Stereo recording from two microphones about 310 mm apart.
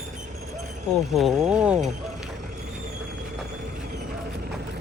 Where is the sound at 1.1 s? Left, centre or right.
Centre.